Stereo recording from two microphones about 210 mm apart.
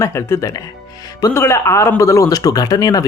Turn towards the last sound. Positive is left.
turn(degrees=15)  # may be behind; listen again after turning